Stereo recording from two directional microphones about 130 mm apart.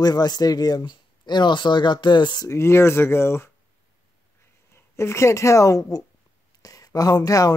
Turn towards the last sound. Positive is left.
turn(degrees=25)  # may be behind; listen again after turning